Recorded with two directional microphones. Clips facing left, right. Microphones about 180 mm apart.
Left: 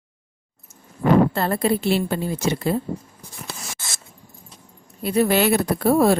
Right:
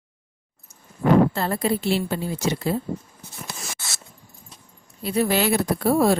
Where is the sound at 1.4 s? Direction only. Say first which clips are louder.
Left 3 dB; 60° left (ahead or behind).